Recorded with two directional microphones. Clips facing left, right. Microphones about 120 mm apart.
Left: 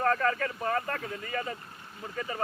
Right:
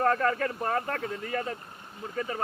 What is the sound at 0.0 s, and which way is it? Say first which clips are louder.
Speech: right 2 dB; 15° right (ahead or behind).